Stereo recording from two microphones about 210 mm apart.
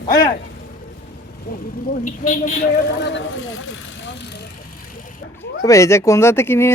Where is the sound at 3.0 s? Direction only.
55° left (ahead or behind).